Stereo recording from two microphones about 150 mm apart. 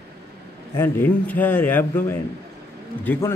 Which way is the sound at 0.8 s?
10° left (ahead or behind).